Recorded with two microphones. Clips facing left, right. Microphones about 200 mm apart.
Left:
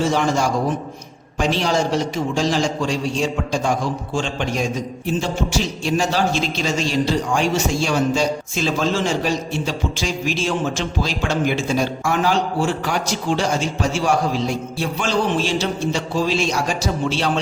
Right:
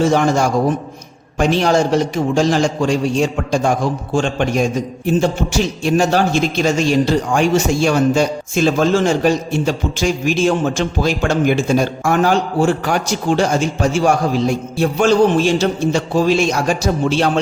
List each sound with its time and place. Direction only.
0.0 s a man's voice: 55° right (ahead or behind)